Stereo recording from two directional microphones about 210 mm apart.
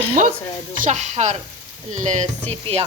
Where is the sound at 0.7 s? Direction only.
35° right (ahead or behind).